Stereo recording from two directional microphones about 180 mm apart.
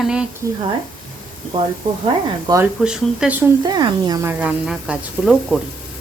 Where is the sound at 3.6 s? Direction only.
20° right (ahead or behind).